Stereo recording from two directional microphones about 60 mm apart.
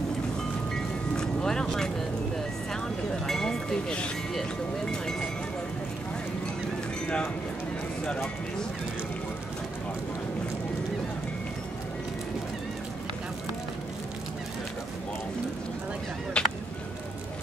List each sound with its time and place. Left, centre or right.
1.1 s vehicle: centre
3.3 s a sound: centre
4.3 s speech: centre
8.0 s speech: centre
16.4 s music: centre